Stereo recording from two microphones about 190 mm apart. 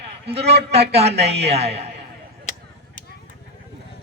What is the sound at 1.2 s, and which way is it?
Speech, 35° right (ahead or behind).